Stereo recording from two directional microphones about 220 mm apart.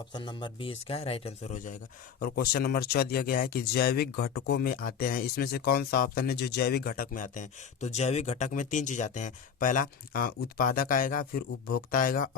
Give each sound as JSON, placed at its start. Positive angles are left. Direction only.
{"t": 0.1, "sound": "speech", "side_deg": 20}
{"t": 2.2, "sound": "speech", "side_deg": 45}